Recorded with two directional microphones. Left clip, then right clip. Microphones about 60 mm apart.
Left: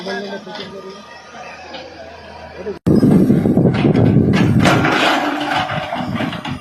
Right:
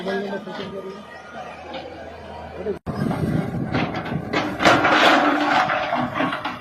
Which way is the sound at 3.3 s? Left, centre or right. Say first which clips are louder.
Left 9 dB; centre.